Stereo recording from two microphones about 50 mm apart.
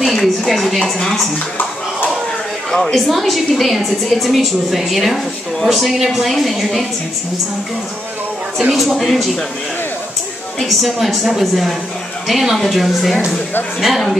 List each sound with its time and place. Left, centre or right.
0.0 s speech: centre
0.7 s speech: centre
2.7 s a woman's voice: centre
8.7 s a woman's voice: centre
10.6 s a woman's voice: centre